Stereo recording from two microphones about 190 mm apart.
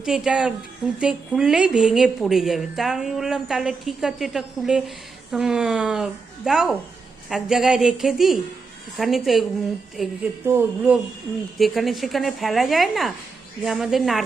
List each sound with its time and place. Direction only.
0.0 s a woman's voice: 5° right (ahead or behind)